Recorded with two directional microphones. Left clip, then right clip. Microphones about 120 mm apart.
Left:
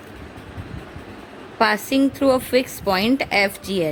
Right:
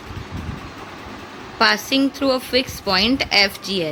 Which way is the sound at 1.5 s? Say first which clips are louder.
Right 1 dB; 30° left (ahead or behind).